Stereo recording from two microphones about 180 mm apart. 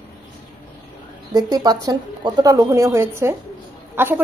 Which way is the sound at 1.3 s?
20° right (ahead or behind).